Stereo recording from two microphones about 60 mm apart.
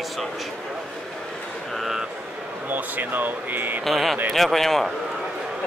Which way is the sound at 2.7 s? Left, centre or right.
Right.